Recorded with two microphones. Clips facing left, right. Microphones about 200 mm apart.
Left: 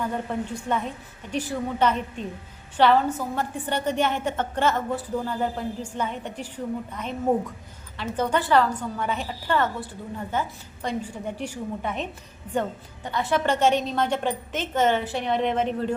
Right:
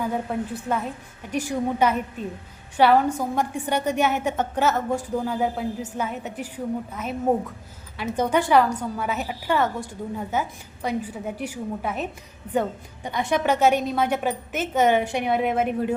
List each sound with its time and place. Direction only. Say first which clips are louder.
0.0 s a woman's voice: right 2 dB; 10° right (ahead or behind)
13.1 s a woman's voice: right 1 dB; 15° right (ahead or behind)